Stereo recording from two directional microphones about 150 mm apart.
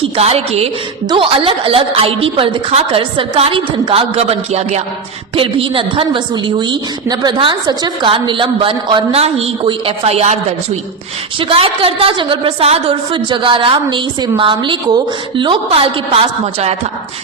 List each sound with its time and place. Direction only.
0.0 s a woman's voice: 40° right (ahead or behind)
11.3 s a woman's voice: 40° right (ahead or behind)